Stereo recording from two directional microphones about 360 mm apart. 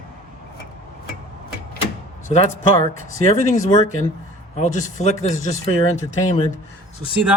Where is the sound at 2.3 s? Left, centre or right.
Centre.